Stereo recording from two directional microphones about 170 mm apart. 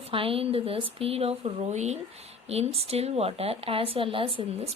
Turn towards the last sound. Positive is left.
turn(degrees=-30)  # may be behind; listen again after turning